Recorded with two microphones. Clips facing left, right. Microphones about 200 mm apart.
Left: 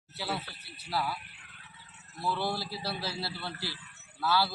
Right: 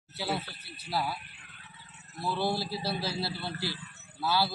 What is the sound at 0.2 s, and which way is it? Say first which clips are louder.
Speech: right 3 dB; 15° right (ahead or behind).